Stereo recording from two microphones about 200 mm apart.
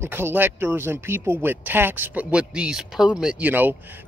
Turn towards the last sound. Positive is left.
turn(degrees=-10)  # may be behind; listen again after turning